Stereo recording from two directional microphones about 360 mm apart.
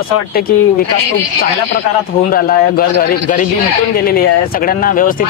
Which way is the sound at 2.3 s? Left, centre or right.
Left.